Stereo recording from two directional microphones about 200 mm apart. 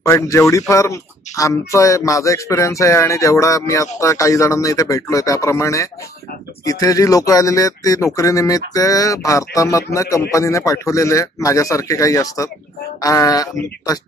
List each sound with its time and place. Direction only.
0.0 s speech: 15° left (ahead or behind)